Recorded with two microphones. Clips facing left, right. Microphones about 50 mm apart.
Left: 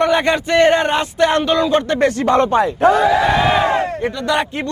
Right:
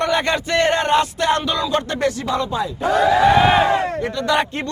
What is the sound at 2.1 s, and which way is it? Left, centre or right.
Speech, left.